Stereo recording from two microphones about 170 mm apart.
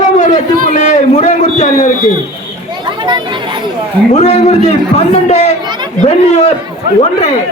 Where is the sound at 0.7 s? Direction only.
45° left (ahead or behind).